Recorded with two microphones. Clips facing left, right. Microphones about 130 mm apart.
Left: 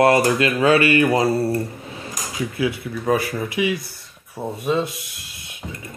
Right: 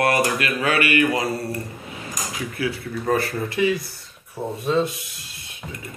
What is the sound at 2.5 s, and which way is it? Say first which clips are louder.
Speech: left 3 dB; 20° left (ahead or behind).